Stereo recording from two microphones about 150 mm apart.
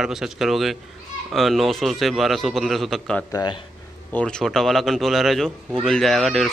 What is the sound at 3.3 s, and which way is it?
Speech, 30° left (ahead or behind).